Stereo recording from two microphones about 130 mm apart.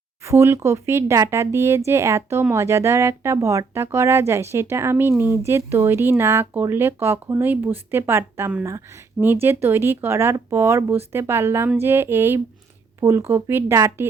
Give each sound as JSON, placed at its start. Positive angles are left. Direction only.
{"t": 0.2, "sound": "speech", "side_deg": -20}